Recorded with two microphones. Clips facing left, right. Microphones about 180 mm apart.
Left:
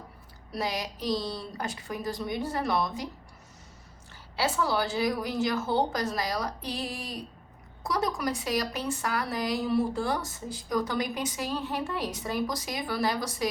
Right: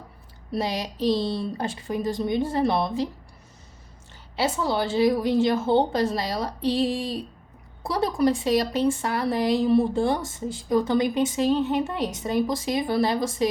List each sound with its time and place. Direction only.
0.5 s speech: 25° right (ahead or behind)
4.4 s speech: 25° right (ahead or behind)